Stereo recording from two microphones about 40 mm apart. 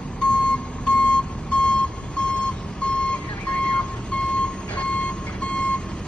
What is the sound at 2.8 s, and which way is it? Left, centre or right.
Vehicle, left.